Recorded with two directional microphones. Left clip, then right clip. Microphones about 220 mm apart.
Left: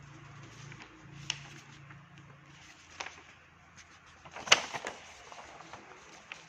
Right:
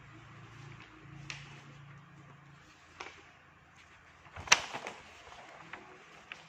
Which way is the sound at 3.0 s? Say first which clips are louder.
Left 4 dB; 40° left (ahead or behind).